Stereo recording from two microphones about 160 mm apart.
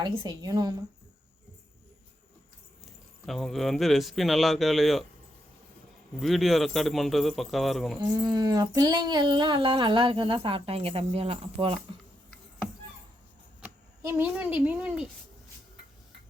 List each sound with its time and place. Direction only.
0.0 s a woman's voice: 30° right (ahead or behind)
3.2 s speech: centre (ahead or behind)
6.1 s speech: centre (ahead or behind)
7.9 s a sound: 25° right (ahead or behind)
13.6 s speech: 15° right (ahead or behind)